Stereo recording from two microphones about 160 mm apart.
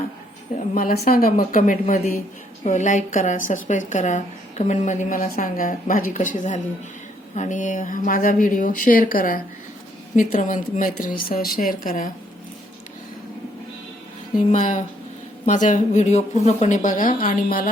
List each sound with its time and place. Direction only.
0.5 s a woman's voice: 60° left (ahead or behind)
14.3 s a woman's voice: 50° left (ahead or behind)